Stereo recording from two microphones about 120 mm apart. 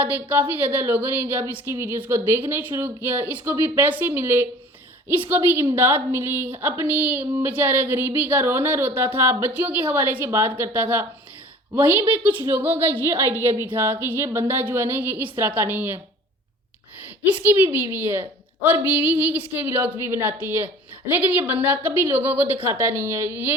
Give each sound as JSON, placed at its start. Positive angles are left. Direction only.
{"t": 0.0, "sound": "speech", "side_deg": -15}
{"t": 17.4, "sound": "speech", "side_deg": -15}